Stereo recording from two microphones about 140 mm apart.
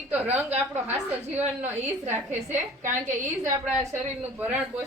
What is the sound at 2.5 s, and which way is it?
Speech, 60° right (ahead or behind).